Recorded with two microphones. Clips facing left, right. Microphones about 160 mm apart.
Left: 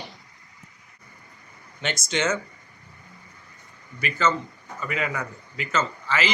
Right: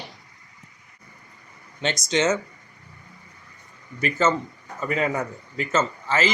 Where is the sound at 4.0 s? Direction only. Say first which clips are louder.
Right 3 dB; 45° right (ahead or behind).